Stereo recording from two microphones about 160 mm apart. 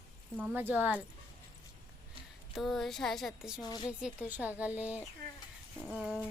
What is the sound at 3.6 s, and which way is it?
Speech, 25° left (ahead or behind).